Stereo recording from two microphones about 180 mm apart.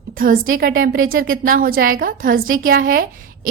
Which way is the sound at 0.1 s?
50° right (ahead or behind).